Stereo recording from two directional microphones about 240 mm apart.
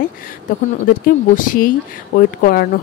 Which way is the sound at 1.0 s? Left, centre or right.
Left.